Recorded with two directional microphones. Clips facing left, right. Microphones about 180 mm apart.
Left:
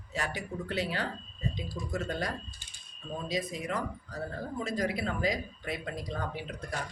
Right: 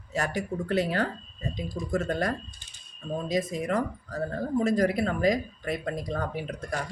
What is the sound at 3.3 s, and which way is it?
Speech, 45° right (ahead or behind).